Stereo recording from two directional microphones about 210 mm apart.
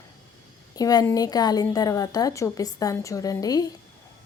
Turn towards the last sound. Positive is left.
turn(degrees=15)  # may be behind; listen again after turning